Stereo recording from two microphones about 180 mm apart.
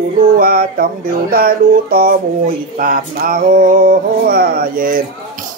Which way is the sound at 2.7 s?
55° right (ahead or behind).